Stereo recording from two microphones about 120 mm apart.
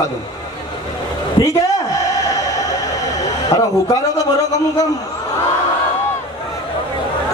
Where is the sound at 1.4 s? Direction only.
30° left (ahead or behind).